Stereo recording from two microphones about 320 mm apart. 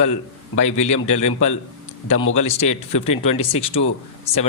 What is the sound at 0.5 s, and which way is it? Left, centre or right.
Speech, left.